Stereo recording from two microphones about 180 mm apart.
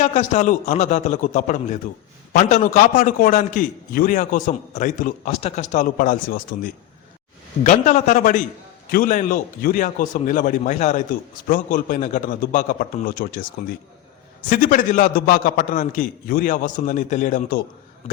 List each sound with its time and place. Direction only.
0.0 s a man's voice: 40° left (ahead or behind)
7.6 s a man's voice: 45° left (ahead or behind)